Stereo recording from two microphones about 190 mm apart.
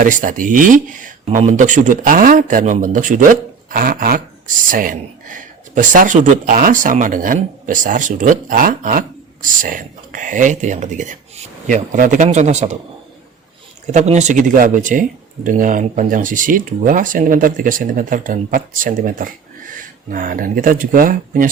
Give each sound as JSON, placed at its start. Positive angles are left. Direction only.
{"t": 0.0, "sound": "speech", "side_deg": -45}
{"t": 13.8, "sound": "speech", "side_deg": -35}